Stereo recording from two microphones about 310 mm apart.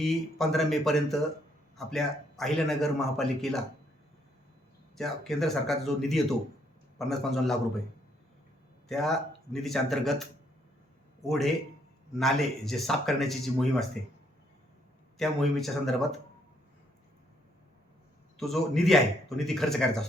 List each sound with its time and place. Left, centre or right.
0.0 s a man's voice: centre
4.9 s a man's voice: centre
8.9 s a man's voice: centre
15.2 s a man's voice: centre
18.3 s a man's voice: centre